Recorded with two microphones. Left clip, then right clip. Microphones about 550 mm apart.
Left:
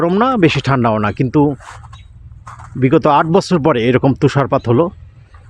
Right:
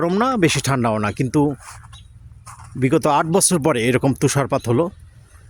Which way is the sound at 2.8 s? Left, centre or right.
Right.